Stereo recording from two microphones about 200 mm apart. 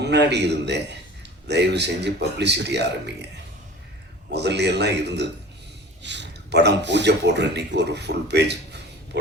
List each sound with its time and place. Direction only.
0.0 s speech: 55° right (ahead or behind)
4.3 s speech: 55° right (ahead or behind)